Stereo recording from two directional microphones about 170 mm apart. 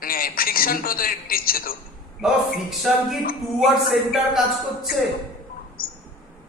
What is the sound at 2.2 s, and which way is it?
Speech, centre (ahead or behind).